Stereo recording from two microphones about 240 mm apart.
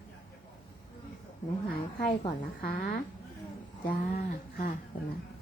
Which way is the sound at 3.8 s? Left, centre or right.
Left.